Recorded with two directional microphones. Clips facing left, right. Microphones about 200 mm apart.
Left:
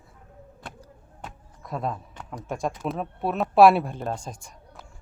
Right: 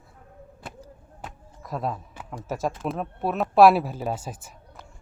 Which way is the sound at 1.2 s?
Centre (ahead or behind).